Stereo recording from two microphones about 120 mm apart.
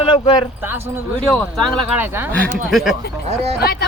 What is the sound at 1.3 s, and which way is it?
Speech, 5° left (ahead or behind).